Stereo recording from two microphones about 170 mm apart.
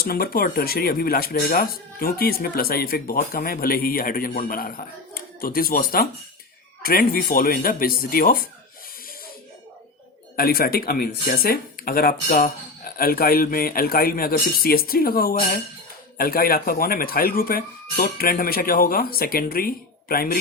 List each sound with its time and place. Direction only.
0.0 s speech: 60° left (ahead or behind)
10.3 s speech: 60° left (ahead or behind)